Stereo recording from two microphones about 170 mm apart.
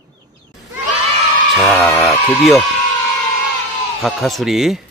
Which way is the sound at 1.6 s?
10° left (ahead or behind).